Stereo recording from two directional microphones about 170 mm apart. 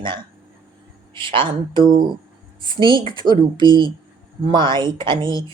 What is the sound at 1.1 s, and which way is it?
Speech, 30° right (ahead or behind).